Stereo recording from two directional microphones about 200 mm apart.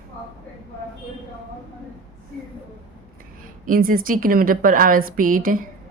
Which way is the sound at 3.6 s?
45° right (ahead or behind).